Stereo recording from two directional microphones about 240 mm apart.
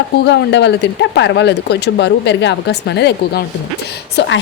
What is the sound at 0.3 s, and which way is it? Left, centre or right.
Speech, left.